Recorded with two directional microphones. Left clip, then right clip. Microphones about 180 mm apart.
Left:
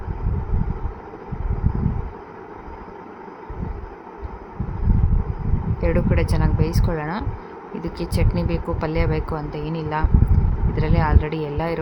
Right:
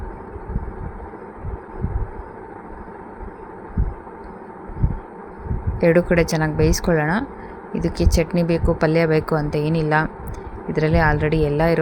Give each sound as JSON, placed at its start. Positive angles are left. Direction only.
{"t": 5.8, "sound": "speech", "side_deg": -25}